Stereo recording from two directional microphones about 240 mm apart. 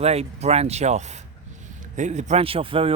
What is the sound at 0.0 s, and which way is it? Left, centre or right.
Speech, right.